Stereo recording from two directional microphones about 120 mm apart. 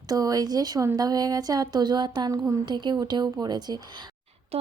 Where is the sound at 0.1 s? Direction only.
30° right (ahead or behind).